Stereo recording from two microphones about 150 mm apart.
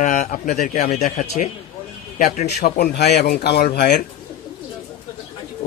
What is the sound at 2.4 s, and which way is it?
Speech, 90° left.